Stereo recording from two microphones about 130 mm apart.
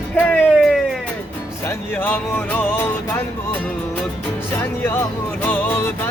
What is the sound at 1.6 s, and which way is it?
Speech, 15° left (ahead or behind).